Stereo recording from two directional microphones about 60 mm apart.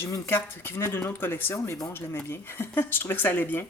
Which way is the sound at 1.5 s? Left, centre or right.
Left.